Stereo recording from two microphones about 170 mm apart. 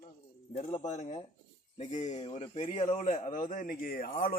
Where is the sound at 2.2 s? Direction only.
30° left (ahead or behind).